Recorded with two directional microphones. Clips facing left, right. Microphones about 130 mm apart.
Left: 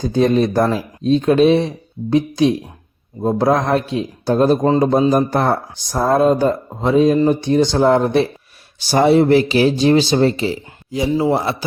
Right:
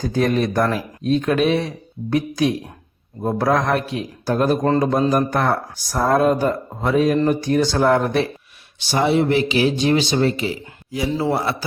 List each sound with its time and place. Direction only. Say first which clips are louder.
0.0 s speech: left 4 dB; 25° left (ahead or behind)
4.6 s speech: left 3 dB; 15° left (ahead or behind)
4.9 s speech: left 4 dB; 30° left (ahead or behind)
8.9 s speech: left 6 dB; 40° left (ahead or behind); by 11.5 s 20° left (ahead or behind)